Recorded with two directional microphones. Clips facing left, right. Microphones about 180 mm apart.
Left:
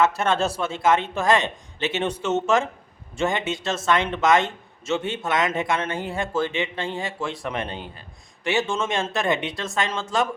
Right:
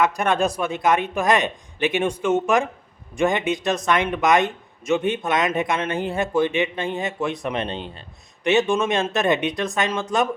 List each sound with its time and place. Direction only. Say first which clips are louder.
0.0 s a man's voice: right 1 dB; 15° right (ahead or behind)